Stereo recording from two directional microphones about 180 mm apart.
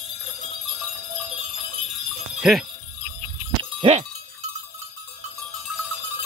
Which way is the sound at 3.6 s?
35° right (ahead or behind).